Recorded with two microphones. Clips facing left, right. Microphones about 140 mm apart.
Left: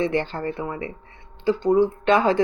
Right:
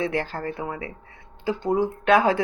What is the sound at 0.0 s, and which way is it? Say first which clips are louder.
Speech: left 3 dB; 5° right (ahead or behind).